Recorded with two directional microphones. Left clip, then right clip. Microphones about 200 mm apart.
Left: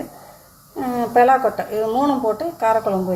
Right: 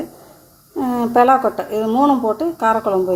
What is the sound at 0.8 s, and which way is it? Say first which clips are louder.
A woman's voice: right 1 dB; 30° right (ahead or behind).